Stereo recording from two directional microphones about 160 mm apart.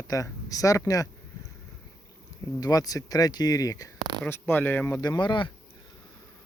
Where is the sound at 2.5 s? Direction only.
25° left (ahead or behind).